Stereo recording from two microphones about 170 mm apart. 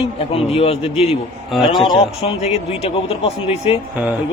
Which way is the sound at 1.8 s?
35° left (ahead or behind).